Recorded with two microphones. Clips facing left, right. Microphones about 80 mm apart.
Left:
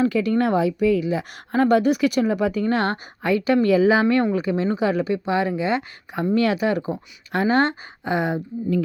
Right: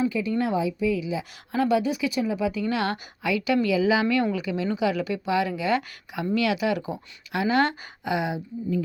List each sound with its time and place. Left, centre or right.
0.0 s a woman's voice: left